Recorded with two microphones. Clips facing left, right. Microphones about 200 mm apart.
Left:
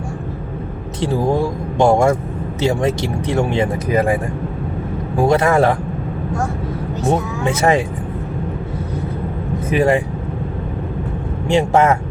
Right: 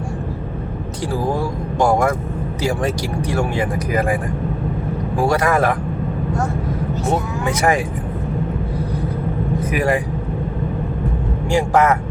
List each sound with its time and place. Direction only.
1.0 s speech: 25° left (ahead or behind)
5.2 s speech: 25° left (ahead or behind)
7.4 s speech: 25° left (ahead or behind)
9.6 s speech: 25° left (ahead or behind)
11.4 s speech: 25° left (ahead or behind)